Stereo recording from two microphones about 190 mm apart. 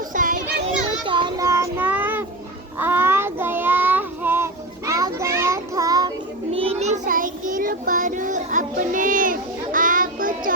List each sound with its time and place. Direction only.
0.1 s child singing: 45° right (ahead or behind)
1.0 s child singing: 25° right (ahead or behind)
6.5 s child singing: 30° right (ahead or behind)